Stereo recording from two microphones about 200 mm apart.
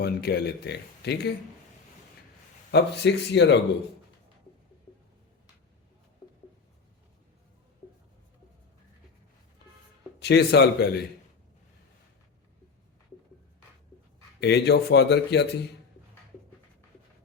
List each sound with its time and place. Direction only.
0.0 s speech: 55° left (ahead or behind)
2.7 s speech: 60° left (ahead or behind)
10.2 s speech: 55° left (ahead or behind)
14.4 s speech: 55° left (ahead or behind)